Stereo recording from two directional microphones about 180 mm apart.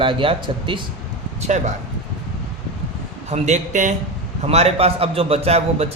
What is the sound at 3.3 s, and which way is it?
A man's voice, 40° right (ahead or behind).